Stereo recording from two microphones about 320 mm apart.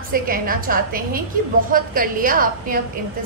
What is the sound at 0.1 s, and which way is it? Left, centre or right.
A woman's voice, right.